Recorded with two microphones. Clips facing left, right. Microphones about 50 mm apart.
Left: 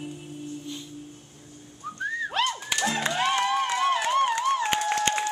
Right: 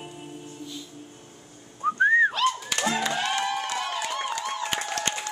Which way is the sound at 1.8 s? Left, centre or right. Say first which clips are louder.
Right 11 dB; right.